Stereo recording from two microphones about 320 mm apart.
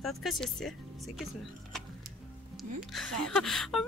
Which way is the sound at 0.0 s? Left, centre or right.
Centre.